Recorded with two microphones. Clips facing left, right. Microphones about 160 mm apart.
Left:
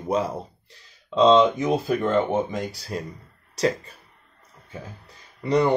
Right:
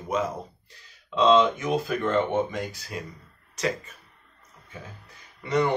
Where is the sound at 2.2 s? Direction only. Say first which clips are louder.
Left 2 dB; 35° left (ahead or behind).